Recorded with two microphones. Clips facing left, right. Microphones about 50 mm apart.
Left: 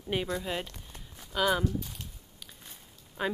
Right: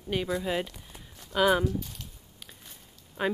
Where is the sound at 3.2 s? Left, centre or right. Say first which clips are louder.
Right 3 dB; centre.